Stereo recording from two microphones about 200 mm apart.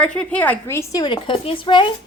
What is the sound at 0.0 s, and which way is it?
A woman's voice, 5° left (ahead or behind).